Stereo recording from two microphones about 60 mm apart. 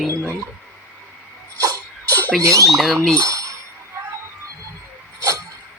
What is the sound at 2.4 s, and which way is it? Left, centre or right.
Speech, right.